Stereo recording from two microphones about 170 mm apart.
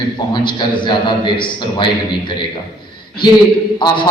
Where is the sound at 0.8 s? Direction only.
25° left (ahead or behind).